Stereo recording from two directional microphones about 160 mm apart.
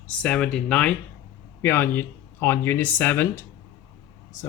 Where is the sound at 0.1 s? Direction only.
5° left (ahead or behind).